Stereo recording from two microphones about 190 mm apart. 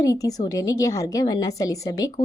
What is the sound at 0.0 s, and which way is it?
A woman's voice, 15° left (ahead or behind).